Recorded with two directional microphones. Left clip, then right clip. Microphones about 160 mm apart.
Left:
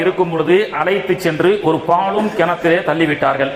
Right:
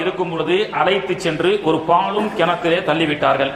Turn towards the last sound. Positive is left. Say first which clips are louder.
# left 1 dB
turn(degrees=35)  # may be behind; listen again after turning